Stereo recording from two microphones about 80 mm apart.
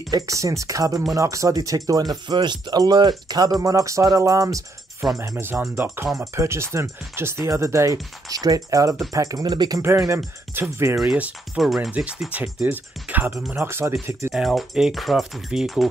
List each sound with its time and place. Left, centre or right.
0.1 s speech: right
2.2 s speech: right
5.2 s speech: right
9.8 s speech: right
11.1 s speech: centre
11.5 s speech: centre
11.9 s speech: centre; by 13.9 s right
14.3 s speech: centre